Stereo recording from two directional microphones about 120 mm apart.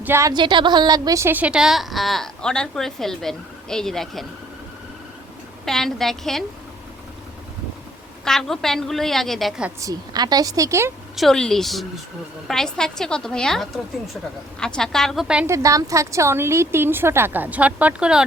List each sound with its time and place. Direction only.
0.0 s a woman's voice: 20° right (ahead or behind)
0.3 s a woman's voice: 40° right (ahead or behind)
1.3 s a woman's voice: 10° right (ahead or behind)
5.6 s a woman's voice: 5° left (ahead or behind)
8.2 s a woman's voice: 5° left (ahead or behind)
9.8 s a woman's voice: 35° right (ahead or behind)
11.2 s a woman's voice: 5° left (ahead or behind)
15.4 s a woman's voice: 25° right (ahead or behind); by 18.2 s 10° right (ahead or behind)